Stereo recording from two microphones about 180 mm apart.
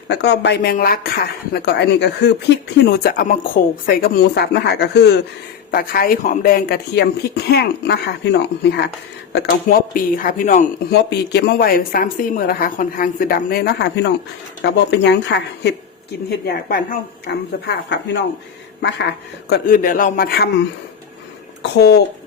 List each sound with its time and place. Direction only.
0.1 s a woman's voice: 70° left (ahead or behind)
5.7 s a woman's voice: 55° left (ahead or behind); by 8.9 s 70° left (ahead or behind)
9.3 s speech: 55° left (ahead or behind)
10.3 s speech: 45° left (ahead or behind)
10.9 s a woman's voice: 70° left (ahead or behind)
16.6 s speech: 60° left (ahead or behind)
19.5 s a woman's voice: 55° left (ahead or behind)
21.6 s speech: 65° left (ahead or behind)